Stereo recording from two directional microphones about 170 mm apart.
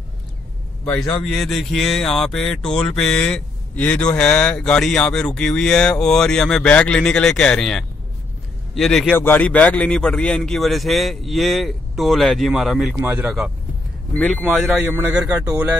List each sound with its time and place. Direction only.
0.8 s speech: 5° left (ahead or behind)
12.9 s a man's voice: 10° right (ahead or behind)
14.1 s speech: 5° left (ahead or behind)
14.9 s a man's voice: 10° right (ahead or behind)